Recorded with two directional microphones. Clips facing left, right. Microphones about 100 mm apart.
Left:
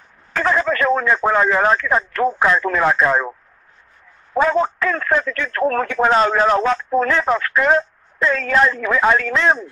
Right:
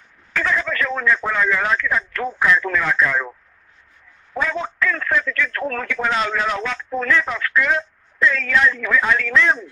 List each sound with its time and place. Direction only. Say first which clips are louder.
0.3 s speech: left 4 dB; 40° left (ahead or behind)